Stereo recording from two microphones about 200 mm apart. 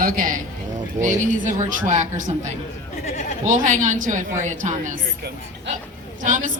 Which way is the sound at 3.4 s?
40° right (ahead or behind).